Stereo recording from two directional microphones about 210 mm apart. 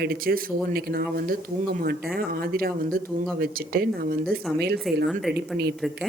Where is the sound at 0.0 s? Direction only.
45° right (ahead or behind).